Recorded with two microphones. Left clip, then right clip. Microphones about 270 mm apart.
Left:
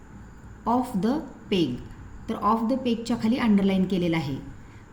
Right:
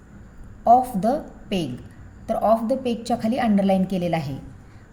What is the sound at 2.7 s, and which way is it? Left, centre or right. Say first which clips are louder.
Speech: right 3 dB; right.